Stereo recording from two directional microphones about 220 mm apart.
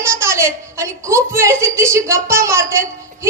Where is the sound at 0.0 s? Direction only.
10° right (ahead or behind).